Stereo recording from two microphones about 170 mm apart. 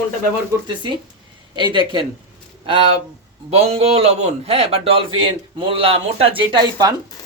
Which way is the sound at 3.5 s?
35° right (ahead or behind).